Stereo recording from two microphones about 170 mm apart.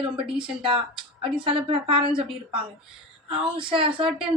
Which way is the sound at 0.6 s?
30° right (ahead or behind).